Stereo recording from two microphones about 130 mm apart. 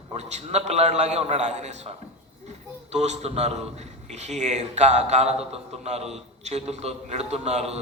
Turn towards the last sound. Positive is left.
turn(degrees=-55)  # may be behind; listen again after turning